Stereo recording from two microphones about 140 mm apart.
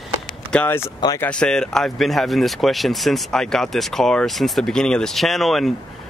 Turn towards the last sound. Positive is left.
turn(degrees=0)  # may be behind; listen again after turning